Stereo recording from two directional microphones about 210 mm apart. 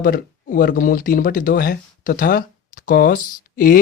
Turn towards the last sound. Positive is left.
turn(degrees=40)  # may be behind; listen again after turning